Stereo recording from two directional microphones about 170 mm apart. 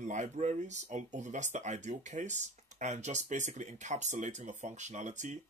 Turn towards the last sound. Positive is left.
turn(degrees=-45)  # may be behind; listen again after turning